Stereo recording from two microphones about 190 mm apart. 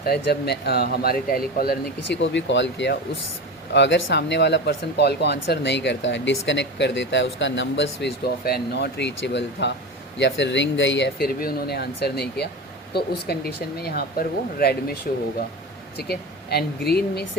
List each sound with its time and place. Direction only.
0.0 s speech: 60° left (ahead or behind)
16.0 s speech: 55° left (ahead or behind)